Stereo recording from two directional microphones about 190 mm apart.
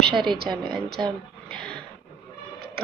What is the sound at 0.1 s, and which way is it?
Speech, 25° right (ahead or behind).